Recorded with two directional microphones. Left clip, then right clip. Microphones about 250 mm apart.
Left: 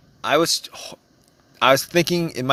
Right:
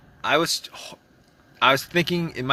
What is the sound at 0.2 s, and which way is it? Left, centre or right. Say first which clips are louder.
Speech: left 3 dB; left.